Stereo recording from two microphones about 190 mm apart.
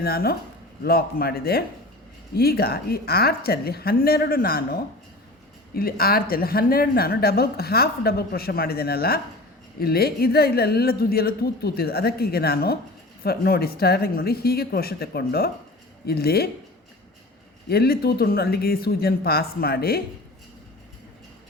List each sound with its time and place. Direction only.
0.0 s a woman's voice: 55° left (ahead or behind)
17.7 s a woman's voice: 55° left (ahead or behind)